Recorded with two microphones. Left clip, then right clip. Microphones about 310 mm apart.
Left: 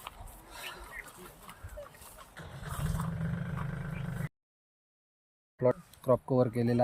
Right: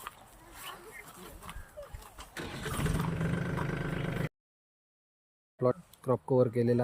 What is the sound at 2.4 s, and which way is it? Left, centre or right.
Vehicle, right.